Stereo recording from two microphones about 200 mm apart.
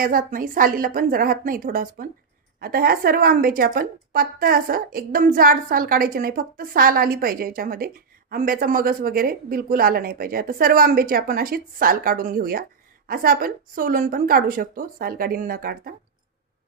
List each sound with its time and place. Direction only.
0.0 s a woman's voice: 45° right (ahead or behind)